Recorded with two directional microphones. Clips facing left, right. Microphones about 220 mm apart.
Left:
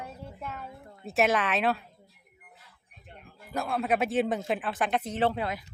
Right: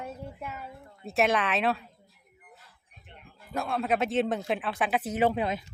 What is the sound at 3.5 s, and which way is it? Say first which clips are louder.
Speech: even; centre (ahead or behind).